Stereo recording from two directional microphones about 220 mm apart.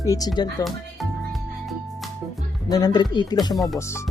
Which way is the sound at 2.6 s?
15° left (ahead or behind).